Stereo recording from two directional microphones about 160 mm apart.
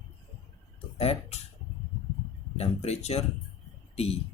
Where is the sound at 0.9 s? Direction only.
40° left (ahead or behind).